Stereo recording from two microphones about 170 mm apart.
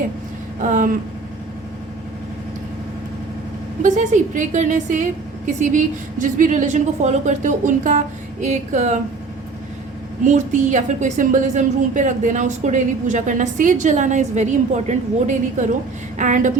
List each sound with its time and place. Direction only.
0.6 s a woman's voice: 50° right (ahead or behind)
3.8 s a woman's voice: 45° right (ahead or behind)
10.2 s a woman's voice: 45° right (ahead or behind)